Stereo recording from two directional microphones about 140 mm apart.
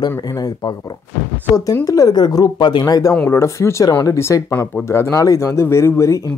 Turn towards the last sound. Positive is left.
turn(degrees=20)  # may be behind; listen again after turning